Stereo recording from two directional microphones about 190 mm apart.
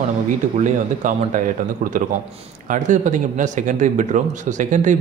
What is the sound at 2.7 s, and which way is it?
Speech, 40° right (ahead or behind).